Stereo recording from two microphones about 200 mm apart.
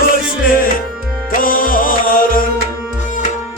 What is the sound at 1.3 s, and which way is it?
Music, 45° left (ahead or behind).